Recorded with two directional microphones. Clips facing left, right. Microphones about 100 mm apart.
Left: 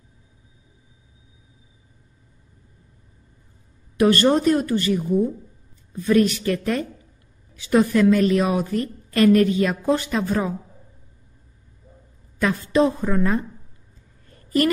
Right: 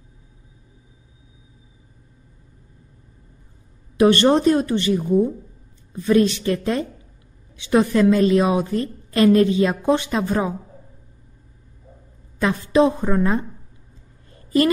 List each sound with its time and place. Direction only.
3.9 s a woman's voice: 25° right (ahead or behind)
12.7 s a woman's voice: 20° right (ahead or behind)
14.3 s a sound: 20° right (ahead or behind)